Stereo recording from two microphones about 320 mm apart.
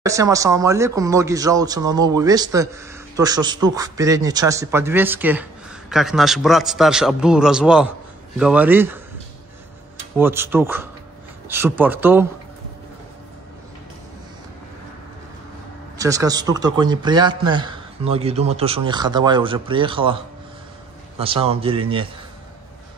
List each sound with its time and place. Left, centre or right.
0.0 s a man's voice: centre
10.1 s speech: centre
16.0 s speech: centre
21.2 s speech: centre